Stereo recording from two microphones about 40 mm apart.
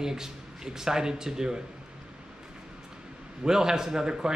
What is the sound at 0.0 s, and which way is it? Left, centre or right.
A man's voice, centre.